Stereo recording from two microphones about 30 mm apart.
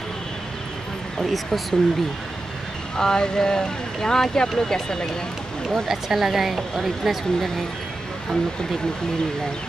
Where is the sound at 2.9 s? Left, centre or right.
Left.